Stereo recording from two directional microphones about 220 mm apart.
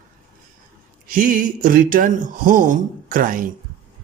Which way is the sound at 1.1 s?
35° right (ahead or behind).